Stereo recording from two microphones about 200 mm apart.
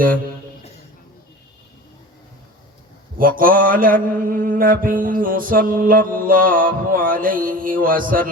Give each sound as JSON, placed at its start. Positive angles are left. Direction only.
{"t": 3.2, "sound": "mantra", "side_deg": -45}